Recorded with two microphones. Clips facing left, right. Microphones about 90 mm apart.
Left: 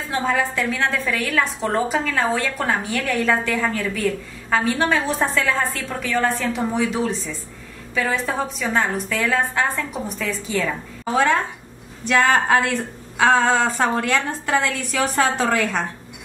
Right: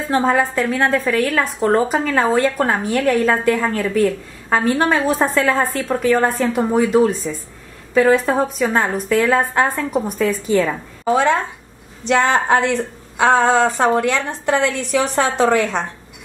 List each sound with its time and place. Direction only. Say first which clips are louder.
0.1 s a woman's voice: right 5 dB; 40° right (ahead or behind)
11.1 s a woman's voice: even; 20° right (ahead or behind)